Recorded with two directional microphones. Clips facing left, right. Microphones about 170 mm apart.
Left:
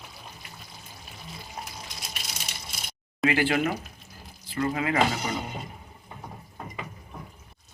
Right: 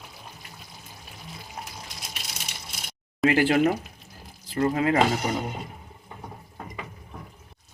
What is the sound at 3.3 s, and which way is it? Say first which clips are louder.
Speech: right 4 dB; 40° right (ahead or behind).